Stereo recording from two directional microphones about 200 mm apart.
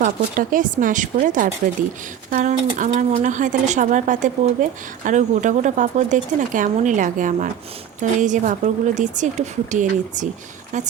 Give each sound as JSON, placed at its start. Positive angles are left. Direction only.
{"t": 0.0, "sound": "speech", "side_deg": -40}